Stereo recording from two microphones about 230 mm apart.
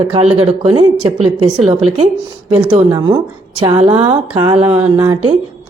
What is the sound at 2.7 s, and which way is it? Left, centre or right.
Speech, centre.